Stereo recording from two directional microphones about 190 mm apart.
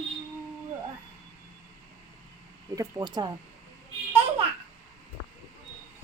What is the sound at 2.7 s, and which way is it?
Speech, 15° right (ahead or behind).